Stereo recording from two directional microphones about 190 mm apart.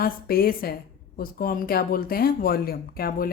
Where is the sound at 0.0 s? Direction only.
50° left (ahead or behind).